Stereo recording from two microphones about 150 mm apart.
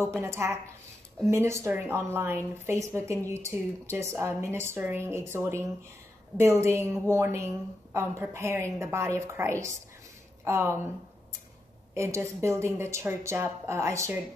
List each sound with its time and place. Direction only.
0.2 s speech: 20° right (ahead or behind)
11.9 s speech: 20° right (ahead or behind)